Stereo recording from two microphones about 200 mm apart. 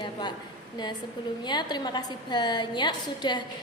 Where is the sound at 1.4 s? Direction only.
20° left (ahead or behind).